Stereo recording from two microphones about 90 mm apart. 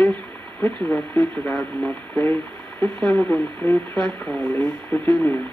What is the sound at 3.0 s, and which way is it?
Speech, 10° left (ahead or behind).